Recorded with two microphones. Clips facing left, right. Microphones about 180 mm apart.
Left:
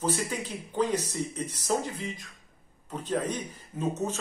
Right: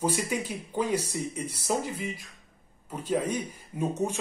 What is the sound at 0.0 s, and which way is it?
Speech, 10° right (ahead or behind).